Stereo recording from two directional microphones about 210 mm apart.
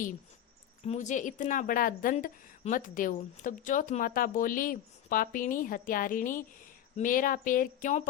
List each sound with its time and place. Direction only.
0.9 s speech: 35° left (ahead or behind)